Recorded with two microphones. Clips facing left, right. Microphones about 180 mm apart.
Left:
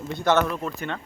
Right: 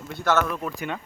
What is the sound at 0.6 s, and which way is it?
Speech, 10° right (ahead or behind).